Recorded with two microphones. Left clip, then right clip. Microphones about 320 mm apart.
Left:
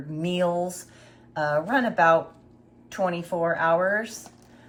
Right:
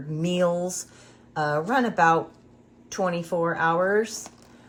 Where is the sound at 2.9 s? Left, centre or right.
Centre.